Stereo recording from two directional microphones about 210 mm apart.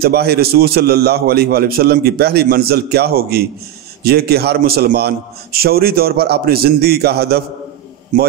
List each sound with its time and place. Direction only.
0.0 s a man's voice: 50° right (ahead or behind)
8.1 s a man's voice: 40° right (ahead or behind)